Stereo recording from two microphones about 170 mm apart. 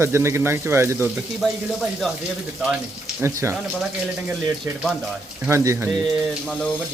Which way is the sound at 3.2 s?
15° right (ahead or behind).